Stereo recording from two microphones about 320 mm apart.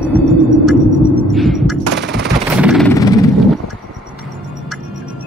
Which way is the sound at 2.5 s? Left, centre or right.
Centre.